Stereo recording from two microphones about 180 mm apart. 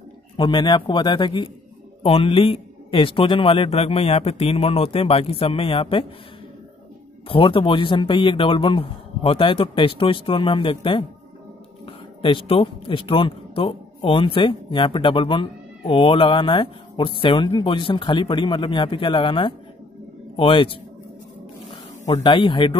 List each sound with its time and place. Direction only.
0.4 s a man's voice: 25° left (ahead or behind)
7.2 s speech: 30° left (ahead or behind)
22.2 s speech: 25° left (ahead or behind)